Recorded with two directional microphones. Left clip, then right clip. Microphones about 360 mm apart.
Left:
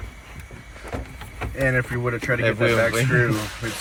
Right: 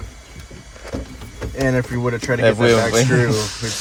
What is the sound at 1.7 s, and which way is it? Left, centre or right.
Speech, centre.